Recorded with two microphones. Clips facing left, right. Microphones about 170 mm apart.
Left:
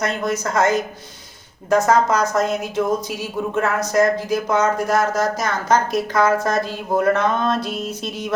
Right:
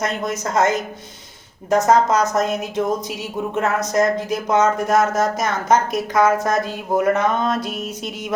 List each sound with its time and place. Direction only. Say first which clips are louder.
0.0 s a woman's voice: left 1 dB; 20° right (ahead or behind)